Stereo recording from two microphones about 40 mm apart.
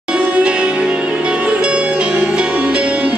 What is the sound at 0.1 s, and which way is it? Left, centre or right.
Music, right.